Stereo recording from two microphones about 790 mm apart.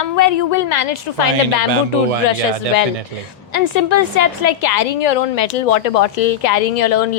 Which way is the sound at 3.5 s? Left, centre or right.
Left.